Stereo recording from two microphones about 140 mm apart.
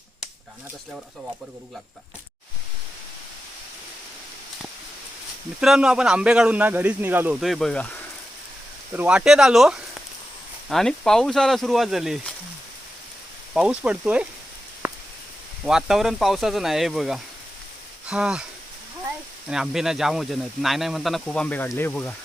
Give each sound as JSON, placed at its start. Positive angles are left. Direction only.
{"t": 5.5, "sound": "a man's voice", "side_deg": -5}
{"t": 7.3, "sound": "speech", "side_deg": 0}
{"t": 8.9, "sound": "speech", "side_deg": -10}
{"t": 13.5, "sound": "a man's voice", "side_deg": -10}
{"t": 14.8, "sound": "a sound", "side_deg": -15}
{"t": 15.6, "sound": "a man's voice", "side_deg": -5}
{"t": 19.5, "sound": "speech", "side_deg": -5}